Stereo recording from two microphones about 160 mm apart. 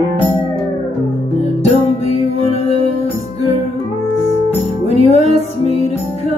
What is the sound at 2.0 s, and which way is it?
Music, 40° left (ahead or behind).